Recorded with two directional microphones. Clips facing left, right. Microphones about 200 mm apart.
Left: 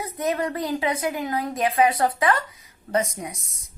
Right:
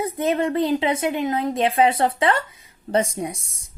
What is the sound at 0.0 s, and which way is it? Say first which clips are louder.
A woman's voice: right 4 dB; 25° right (ahead or behind).